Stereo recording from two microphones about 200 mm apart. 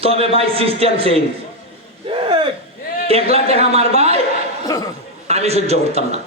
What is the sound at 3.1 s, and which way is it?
Speech, 30° right (ahead or behind).